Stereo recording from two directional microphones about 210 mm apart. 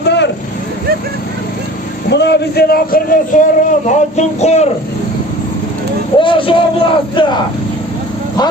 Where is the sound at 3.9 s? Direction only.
35° left (ahead or behind).